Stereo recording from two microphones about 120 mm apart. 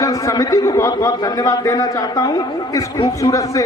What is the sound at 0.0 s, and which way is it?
A man's voice, 30° left (ahead or behind).